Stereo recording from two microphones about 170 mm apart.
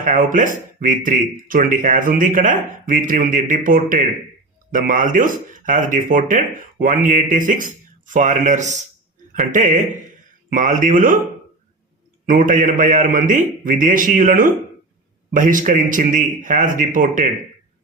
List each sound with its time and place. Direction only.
0.0 s speech: 50° right (ahead or behind)
12.3 s speech: 50° right (ahead or behind)